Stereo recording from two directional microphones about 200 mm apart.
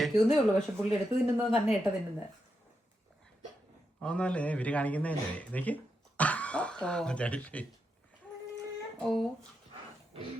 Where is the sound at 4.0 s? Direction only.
5° left (ahead or behind).